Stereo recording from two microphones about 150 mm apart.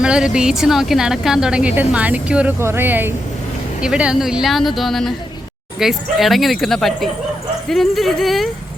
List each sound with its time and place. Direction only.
0.0 s a woman's voice: 5° right (ahead or behind)